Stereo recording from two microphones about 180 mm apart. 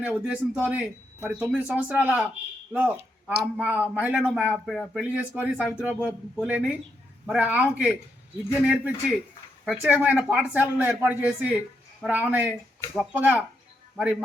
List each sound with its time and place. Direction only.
0.0 s speech: 5° right (ahead or behind)